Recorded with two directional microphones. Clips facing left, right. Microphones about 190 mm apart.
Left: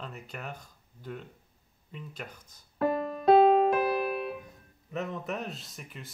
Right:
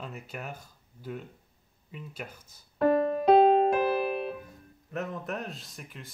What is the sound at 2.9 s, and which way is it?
Music, 40° right (ahead or behind).